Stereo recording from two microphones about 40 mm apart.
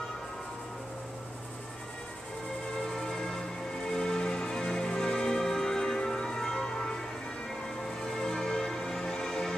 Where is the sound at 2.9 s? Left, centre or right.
Centre.